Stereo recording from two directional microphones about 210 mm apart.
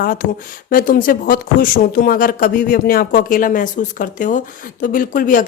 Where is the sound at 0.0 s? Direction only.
45° left (ahead or behind).